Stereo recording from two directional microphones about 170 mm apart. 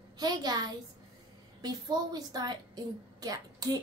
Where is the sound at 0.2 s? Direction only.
25° right (ahead or behind).